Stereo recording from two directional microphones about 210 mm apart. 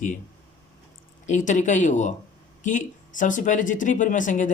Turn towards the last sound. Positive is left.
turn(degrees=35)  # may be behind; listen again after turning